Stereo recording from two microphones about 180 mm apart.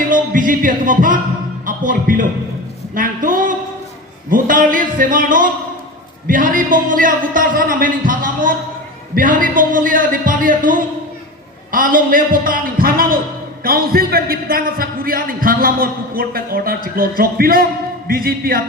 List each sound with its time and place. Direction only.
0.1 s music: 50° right (ahead or behind)
1.6 s a man's voice: 50° right (ahead or behind)
2.9 s a sound: 50° right (ahead or behind)
4.3 s a man's voice: 50° right (ahead or behind)